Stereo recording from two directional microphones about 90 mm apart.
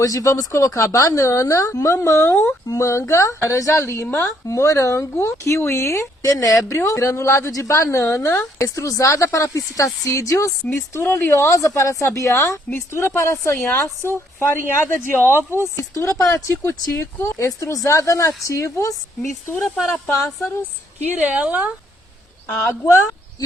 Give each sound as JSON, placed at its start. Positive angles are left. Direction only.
{"t": 0.0, "sound": "speech", "side_deg": 40}
{"t": 2.6, "sound": "speech", "side_deg": 35}
{"t": 4.4, "sound": "speech", "side_deg": 35}
{"t": 19.6, "sound": "speech", "side_deg": -5}
{"t": 21.1, "sound": "a woman's voice", "side_deg": -15}
{"t": 22.4, "sound": "speech", "side_deg": 30}